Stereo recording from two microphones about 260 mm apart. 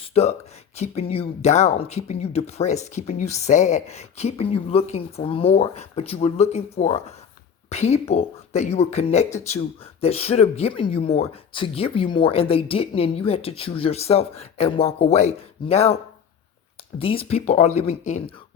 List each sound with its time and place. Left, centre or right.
0.1 s speech: left
17.0 s speech: left